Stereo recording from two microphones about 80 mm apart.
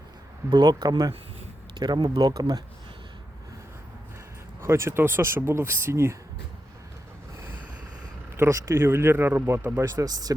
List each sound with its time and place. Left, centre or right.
0.5 s speech: right
1.7 s speech: right
4.6 s speech: right
8.4 s speech: right
10.0 s speech: right